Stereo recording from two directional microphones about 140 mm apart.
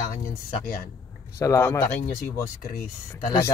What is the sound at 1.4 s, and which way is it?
Speech, 20° left (ahead or behind).